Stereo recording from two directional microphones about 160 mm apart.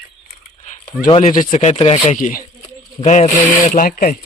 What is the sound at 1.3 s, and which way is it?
Speech, 50° left (ahead or behind).